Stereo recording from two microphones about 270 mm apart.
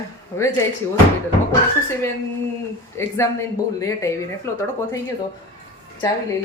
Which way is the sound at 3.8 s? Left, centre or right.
Centre.